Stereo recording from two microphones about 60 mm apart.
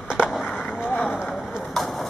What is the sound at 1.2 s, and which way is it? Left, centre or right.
Chop, centre.